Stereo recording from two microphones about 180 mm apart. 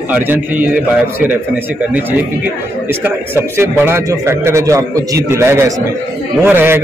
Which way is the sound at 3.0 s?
10° right (ahead or behind).